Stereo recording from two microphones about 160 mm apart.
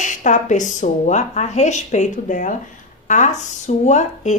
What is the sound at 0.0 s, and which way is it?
Speech, 50° left (ahead or behind).